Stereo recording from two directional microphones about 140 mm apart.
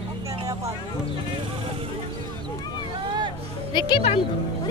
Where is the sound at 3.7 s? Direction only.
35° left (ahead or behind).